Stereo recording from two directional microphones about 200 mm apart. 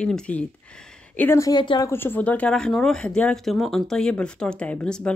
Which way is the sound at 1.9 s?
10° left (ahead or behind).